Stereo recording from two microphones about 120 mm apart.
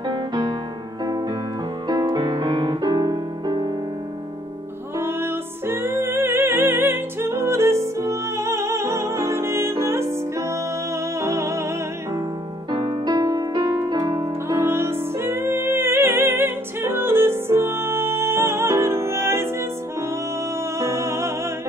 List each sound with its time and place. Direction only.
0.1 s music: 40° right (ahead or behind)
2.0 s music: 40° right (ahead or behind)
4.9 s music: 20° right (ahead or behind)
12.7 s music: 40° right (ahead or behind)
14.5 s music: 20° right (ahead or behind)
20.8 s music: 25° right (ahead or behind)